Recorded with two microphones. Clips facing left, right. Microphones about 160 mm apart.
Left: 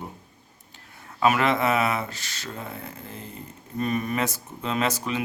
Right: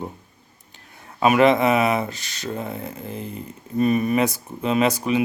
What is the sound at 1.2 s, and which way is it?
Speech, 20° right (ahead or behind).